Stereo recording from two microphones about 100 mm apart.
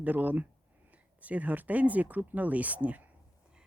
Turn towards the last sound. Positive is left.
turn(degrees=-15)  # may be behind; listen again after turning